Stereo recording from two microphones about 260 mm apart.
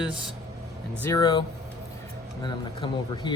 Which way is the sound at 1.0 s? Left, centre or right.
Centre.